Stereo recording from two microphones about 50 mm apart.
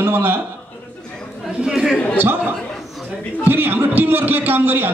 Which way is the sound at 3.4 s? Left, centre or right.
Right.